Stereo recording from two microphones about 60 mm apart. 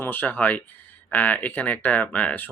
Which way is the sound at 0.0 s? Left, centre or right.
Left.